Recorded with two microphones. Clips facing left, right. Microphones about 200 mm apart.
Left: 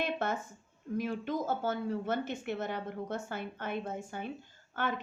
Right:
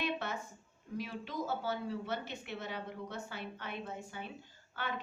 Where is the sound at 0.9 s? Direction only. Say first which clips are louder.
Left 6 dB; 50° left (ahead or behind).